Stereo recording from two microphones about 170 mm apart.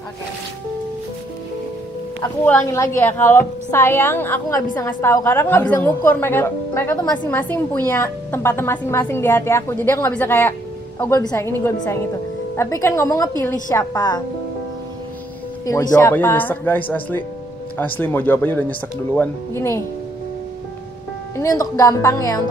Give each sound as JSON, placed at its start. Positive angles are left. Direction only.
{"t": 2.4, "sound": "a woman's voice", "side_deg": 15}
{"t": 15.6, "sound": "a woman's voice", "side_deg": 20}
{"t": 21.4, "sound": "speech", "side_deg": 20}